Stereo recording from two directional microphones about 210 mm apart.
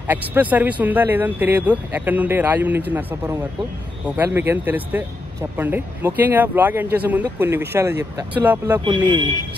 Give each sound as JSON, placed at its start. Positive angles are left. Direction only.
{"t": 0.1, "sound": "a man's voice", "side_deg": -10}
{"t": 8.8, "sound": "speech", "side_deg": -20}